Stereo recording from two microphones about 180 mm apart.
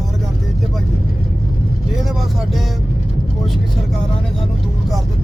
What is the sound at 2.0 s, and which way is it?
Vehicle, centre (ahead or behind).